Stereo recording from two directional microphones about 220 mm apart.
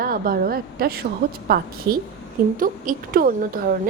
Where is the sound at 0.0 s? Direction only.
40° right (ahead or behind).